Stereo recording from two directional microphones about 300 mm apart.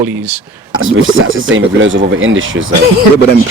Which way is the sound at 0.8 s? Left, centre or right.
Right.